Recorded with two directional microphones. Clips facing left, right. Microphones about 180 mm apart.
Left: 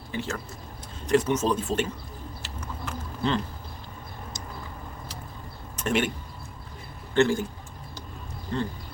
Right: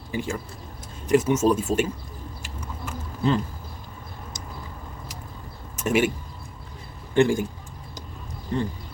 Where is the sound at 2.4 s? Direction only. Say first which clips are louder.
Even; 10° right (ahead or behind).